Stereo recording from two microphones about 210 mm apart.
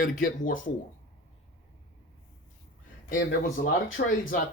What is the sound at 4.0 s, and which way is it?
Speech, 55° left (ahead or behind).